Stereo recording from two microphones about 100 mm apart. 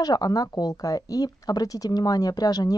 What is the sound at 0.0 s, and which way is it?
Speech, 40° left (ahead or behind).